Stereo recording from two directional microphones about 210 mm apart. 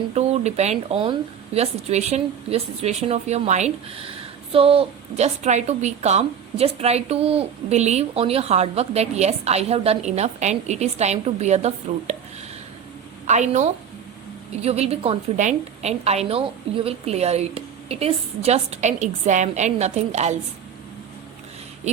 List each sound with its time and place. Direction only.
0.1 s a woman's voice: 30° right (ahead or behind)
13.2 s a woman's voice: 35° right (ahead or behind)